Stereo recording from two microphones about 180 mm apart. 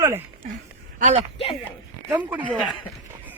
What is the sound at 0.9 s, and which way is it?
Speech, 40° right (ahead or behind).